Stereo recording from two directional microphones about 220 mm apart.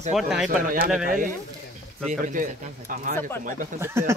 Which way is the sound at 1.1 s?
40° right (ahead or behind).